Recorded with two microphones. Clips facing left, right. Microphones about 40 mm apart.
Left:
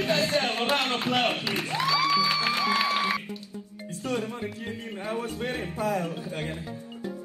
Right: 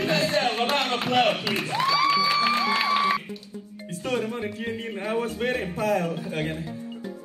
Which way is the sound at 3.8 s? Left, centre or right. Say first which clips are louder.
Right 3 dB; right.